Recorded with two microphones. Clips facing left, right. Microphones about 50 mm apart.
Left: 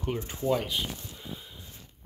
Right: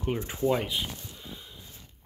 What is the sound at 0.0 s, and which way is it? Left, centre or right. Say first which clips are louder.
Speech: right 3 dB; centre.